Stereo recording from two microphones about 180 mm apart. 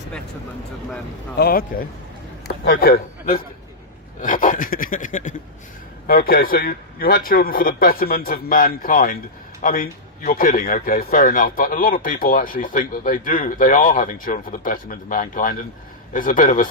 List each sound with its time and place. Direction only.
1.4 s a man's voice: 55° left (ahead or behind)
2.6 s a man's voice: 55° left (ahead or behind)